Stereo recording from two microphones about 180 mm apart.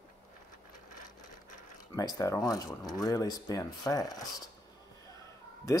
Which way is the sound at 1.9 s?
20° left (ahead or behind).